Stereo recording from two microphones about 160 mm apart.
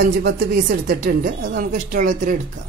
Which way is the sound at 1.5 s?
55° right (ahead or behind).